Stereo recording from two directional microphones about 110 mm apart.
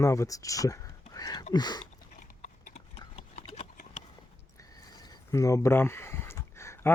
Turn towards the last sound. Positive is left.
turn(degrees=25)  # may be behind; listen again after turning